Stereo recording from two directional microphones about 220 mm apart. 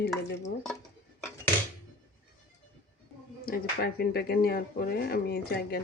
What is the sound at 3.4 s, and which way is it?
Speech, 40° left (ahead or behind).